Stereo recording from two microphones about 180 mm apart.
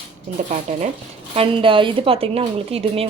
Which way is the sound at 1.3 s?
30° right (ahead or behind).